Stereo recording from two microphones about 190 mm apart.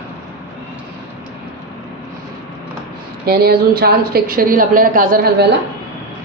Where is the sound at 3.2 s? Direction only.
55° right (ahead or behind).